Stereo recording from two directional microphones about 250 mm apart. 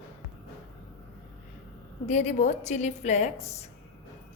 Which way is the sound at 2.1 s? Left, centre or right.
Left.